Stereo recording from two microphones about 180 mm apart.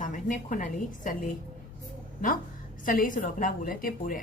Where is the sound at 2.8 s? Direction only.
50° left (ahead or behind).